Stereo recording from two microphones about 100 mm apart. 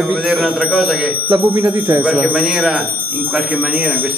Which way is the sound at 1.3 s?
20° right (ahead or behind).